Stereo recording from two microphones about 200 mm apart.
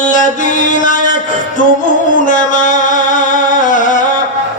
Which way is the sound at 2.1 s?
40° left (ahead or behind).